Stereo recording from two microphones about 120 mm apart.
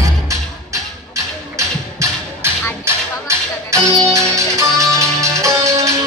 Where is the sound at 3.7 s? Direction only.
25° right (ahead or behind).